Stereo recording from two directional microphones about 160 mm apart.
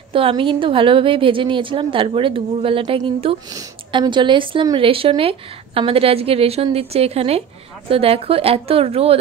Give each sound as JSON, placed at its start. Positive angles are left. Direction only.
{"t": 0.1, "sound": "a woman's voice", "side_deg": -35}